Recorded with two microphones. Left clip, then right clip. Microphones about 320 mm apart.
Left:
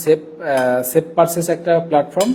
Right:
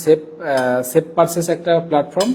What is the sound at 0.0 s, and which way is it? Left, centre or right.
Speech, right.